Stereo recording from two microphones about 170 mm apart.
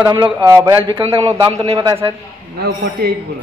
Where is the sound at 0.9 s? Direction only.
30° right (ahead or behind).